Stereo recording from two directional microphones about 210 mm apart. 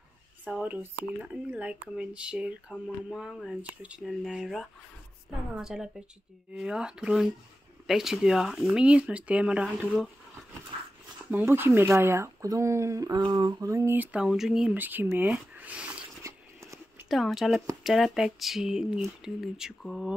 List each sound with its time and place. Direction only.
0.5 s speech: 5° right (ahead or behind)
11.2 s speech: 10° right (ahead or behind)
15.1 s a sound: 10° right (ahead or behind)
17.1 s speech: centre (ahead or behind)